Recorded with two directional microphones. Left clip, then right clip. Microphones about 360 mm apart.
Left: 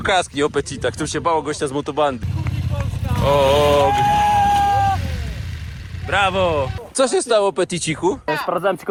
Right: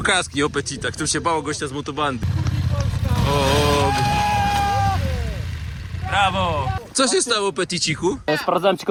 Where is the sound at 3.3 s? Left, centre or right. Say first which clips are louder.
Left 5 dB; centre.